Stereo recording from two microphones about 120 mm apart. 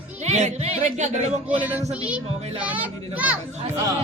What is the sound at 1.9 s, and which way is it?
Speech, 10° right (ahead or behind).